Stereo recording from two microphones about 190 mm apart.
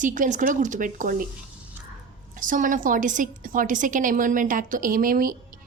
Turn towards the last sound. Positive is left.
turn(degrees=-45)  # may be behind; listen again after turning